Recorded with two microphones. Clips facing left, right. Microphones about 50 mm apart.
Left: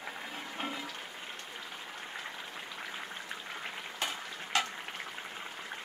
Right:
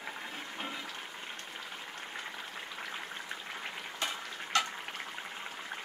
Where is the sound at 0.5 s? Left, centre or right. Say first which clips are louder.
Left 3 dB; centre.